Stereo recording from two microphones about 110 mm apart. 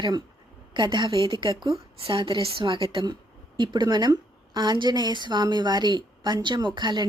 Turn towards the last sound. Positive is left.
turn(degrees=-45)  # may be behind; listen again after turning